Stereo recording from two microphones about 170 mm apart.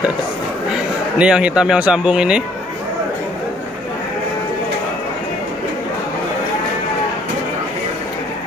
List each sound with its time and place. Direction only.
1.1 s a man's voice: 5° right (ahead or behind)